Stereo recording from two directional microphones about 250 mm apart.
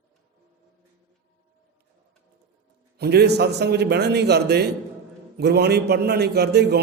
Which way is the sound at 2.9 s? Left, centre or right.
Right.